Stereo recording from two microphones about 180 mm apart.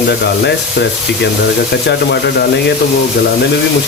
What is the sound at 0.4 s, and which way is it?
Speech, 70° left (ahead or behind).